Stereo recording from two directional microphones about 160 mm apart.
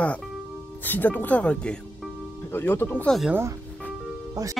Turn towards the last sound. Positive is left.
turn(degrees=-20)  # may be behind; listen again after turning